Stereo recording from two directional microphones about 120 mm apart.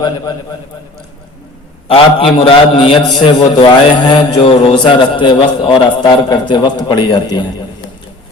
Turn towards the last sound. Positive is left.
turn(degrees=40)  # may be behind; listen again after turning